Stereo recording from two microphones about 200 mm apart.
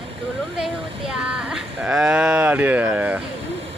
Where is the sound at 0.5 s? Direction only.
5° right (ahead or behind).